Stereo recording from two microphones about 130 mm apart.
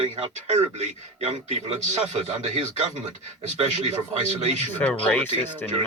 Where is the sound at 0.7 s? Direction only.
55° right (ahead or behind).